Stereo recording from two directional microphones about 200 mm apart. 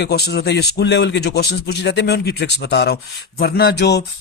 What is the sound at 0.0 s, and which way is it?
Speech, 55° left (ahead or behind).